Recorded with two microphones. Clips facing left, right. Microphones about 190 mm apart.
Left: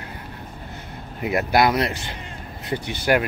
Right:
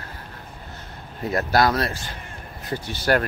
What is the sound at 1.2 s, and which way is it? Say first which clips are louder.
Speech: left 1 dB; 15° left (ahead or behind).